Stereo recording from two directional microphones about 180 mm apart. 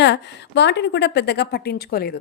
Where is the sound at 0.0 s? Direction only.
75° left (ahead or behind).